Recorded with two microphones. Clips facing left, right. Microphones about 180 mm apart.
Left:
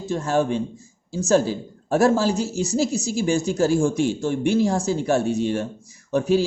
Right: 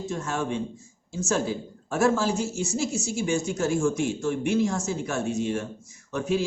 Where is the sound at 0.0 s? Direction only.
35° left (ahead or behind).